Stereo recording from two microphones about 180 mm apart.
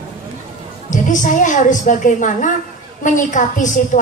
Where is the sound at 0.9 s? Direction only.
45° left (ahead or behind).